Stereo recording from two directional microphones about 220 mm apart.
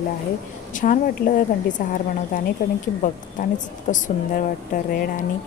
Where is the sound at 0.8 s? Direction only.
40° left (ahead or behind).